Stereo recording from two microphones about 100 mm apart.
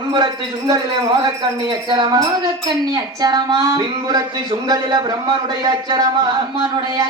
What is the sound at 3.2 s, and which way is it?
Speech, 45° right (ahead or behind).